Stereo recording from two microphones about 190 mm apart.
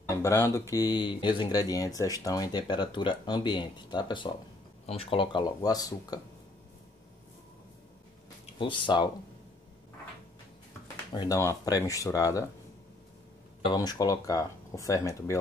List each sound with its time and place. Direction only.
0.0 s speech: 15° left (ahead or behind)
8.5 s speech: 25° left (ahead or behind)
11.1 s speech: 20° left (ahead or behind)
13.7 s speech: 20° left (ahead or behind)